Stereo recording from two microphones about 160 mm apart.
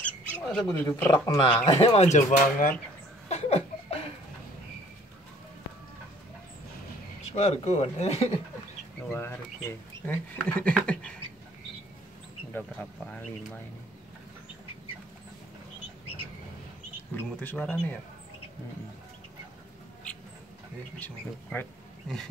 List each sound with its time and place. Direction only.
0.7 s speech: 15° left (ahead or behind); by 2.7 s 50° left (ahead or behind)
3.3 s laughter: 45° left (ahead or behind)
7.3 s speech: 45° left (ahead or behind)
9.1 s speech: 15° left (ahead or behind)
12.5 s speech: 10° left (ahead or behind)
17.1 s speech: 10° left (ahead or behind)
21.0 s speech: 5° left (ahead or behind)